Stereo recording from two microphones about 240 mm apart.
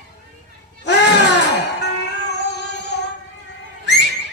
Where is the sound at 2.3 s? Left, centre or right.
Left.